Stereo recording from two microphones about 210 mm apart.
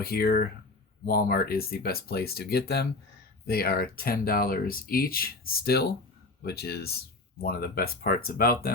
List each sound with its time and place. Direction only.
0.0 s speech: 45° left (ahead or behind)